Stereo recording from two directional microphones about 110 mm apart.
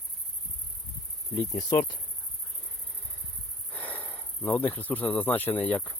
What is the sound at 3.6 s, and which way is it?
Speech, 15° left (ahead or behind).